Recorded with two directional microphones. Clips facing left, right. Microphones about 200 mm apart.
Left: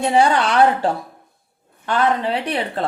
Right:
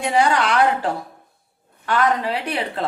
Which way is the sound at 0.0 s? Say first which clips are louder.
Left 2 dB; 30° left (ahead or behind).